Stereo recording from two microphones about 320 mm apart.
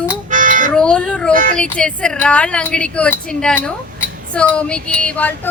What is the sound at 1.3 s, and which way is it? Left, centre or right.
Speech, right.